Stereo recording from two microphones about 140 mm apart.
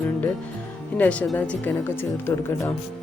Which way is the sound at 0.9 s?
10° left (ahead or behind).